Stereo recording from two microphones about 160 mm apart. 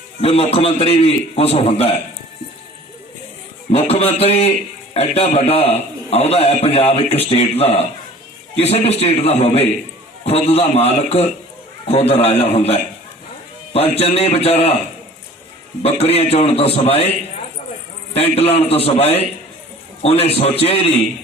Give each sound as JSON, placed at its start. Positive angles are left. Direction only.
{"t": 0.2, "sound": "a man's voice", "side_deg": 40}
{"t": 3.7, "sound": "a man's voice", "side_deg": 40}
{"t": 15.8, "sound": "a man's voice", "side_deg": 40}
{"t": 18.1, "sound": "a man's voice", "side_deg": 40}